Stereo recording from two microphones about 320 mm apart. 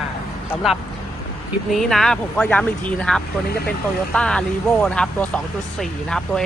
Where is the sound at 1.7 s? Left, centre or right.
Centre.